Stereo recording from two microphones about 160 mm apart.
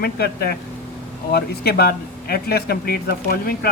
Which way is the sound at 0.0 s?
75° left (ahead or behind).